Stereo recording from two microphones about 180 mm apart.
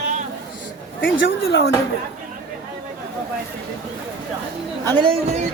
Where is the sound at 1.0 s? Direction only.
90° left.